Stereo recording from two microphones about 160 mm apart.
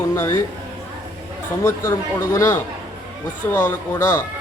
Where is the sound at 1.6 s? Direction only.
15° left (ahead or behind).